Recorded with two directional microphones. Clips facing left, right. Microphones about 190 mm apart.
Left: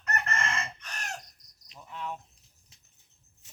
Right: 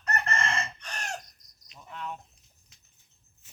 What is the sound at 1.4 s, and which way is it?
Cricket, 35° left (ahead or behind).